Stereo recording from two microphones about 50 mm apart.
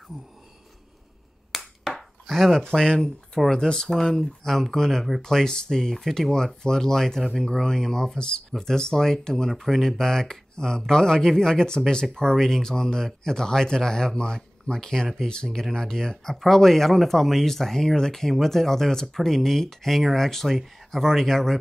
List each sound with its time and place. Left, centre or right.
1.5 s finger snapping: centre
2.6 s speech: centre